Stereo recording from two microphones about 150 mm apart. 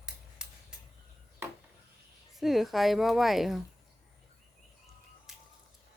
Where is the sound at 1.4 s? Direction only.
15° right (ahead or behind).